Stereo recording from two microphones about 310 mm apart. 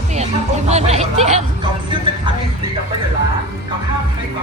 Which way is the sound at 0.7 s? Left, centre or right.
Right.